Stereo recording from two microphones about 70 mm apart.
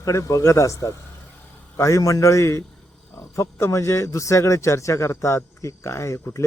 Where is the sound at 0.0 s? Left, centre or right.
Left.